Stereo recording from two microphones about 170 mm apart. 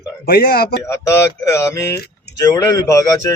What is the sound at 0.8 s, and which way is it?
A man's voice, 15° left (ahead or behind).